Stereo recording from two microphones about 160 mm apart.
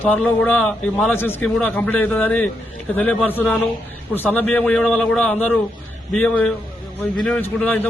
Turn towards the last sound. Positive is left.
turn(degrees=10)  # may be behind; listen again after turning